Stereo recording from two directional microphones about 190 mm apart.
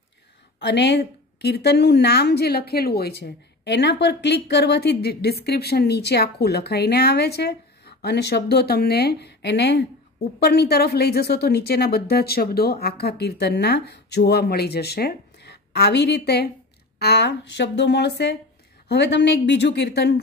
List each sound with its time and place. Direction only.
0.6 s a woman's voice: 65° left (ahead or behind)